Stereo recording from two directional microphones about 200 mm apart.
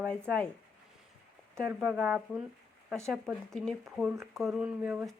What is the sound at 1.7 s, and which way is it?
Speech, 10° right (ahead or behind).